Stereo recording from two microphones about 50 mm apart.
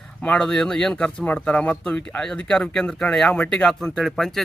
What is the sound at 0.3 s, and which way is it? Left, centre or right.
Speech, centre.